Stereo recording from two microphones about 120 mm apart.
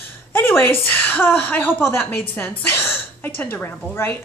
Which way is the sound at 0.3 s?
20° left (ahead or behind).